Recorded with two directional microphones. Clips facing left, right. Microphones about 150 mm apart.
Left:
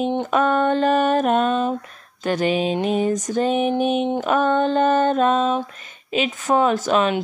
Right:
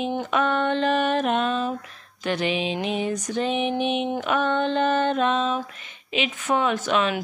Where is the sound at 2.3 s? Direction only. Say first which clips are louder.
Left 5 dB; 45° left (ahead or behind).